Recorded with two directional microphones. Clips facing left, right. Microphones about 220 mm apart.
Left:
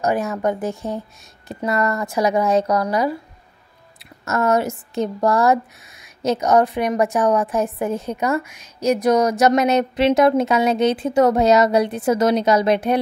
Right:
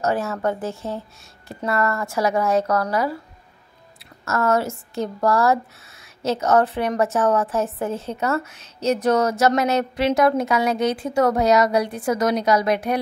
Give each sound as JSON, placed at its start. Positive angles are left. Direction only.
{"t": 0.0, "sound": "speech", "side_deg": 15}
{"t": 4.2, "sound": "speech", "side_deg": 20}